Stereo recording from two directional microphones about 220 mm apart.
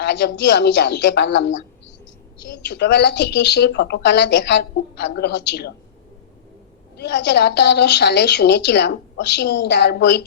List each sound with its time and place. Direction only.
0.0 s a woman's voice: 50° left (ahead or behind)
2.6 s a woman's voice: 50° left (ahead or behind)
6.9 s a woman's voice: 50° left (ahead or behind)